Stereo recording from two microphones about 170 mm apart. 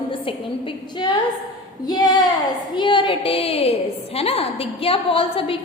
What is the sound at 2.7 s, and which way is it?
A woman's voice, 30° left (ahead or behind).